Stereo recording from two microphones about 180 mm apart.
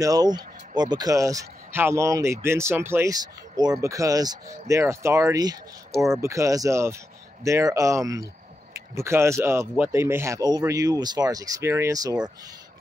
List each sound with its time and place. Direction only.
0.0 s speech: 20° right (ahead or behind)